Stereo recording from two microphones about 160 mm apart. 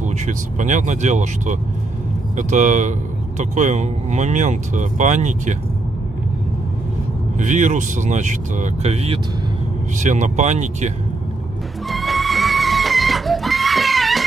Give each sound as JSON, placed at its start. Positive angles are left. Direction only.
{"t": 0.2, "sound": "speech", "side_deg": -50}
{"t": 7.3, "sound": "speech", "side_deg": -50}
{"t": 11.9, "sound": "music", "side_deg": 0}